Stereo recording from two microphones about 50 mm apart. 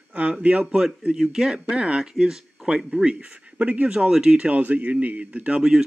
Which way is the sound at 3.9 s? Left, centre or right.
Centre.